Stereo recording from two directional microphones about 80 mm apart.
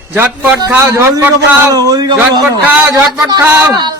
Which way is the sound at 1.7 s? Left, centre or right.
Right.